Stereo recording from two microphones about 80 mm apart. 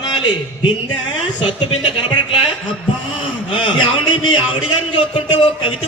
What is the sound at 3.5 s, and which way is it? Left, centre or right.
Speech, left.